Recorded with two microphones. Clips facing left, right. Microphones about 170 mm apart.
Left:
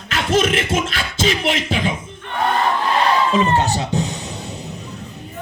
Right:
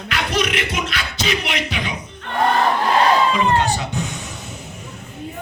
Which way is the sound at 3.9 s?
35° left (ahead or behind).